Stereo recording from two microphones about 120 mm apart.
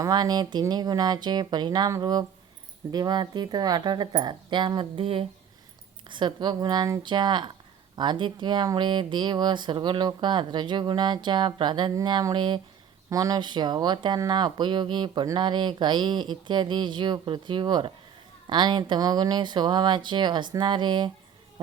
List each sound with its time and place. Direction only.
0.0 s speech: 35° right (ahead or behind); by 5.2 s 50° right (ahead or behind)
6.1 s speech: 40° right (ahead or behind)